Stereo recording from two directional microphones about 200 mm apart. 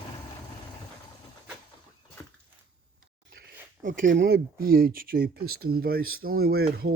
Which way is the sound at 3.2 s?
50° right (ahead or behind).